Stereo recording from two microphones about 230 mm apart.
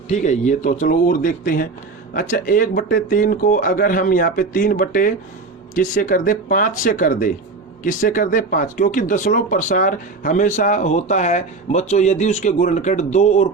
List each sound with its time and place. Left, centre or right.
0.1 s speech: left